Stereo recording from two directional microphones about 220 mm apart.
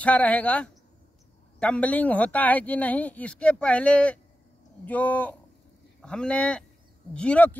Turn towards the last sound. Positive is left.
turn(degrees=5)  # may be behind; listen again after turning